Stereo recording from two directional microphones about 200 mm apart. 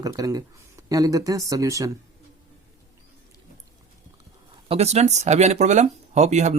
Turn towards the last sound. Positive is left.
turn(degrees=-35)  # may be behind; listen again after turning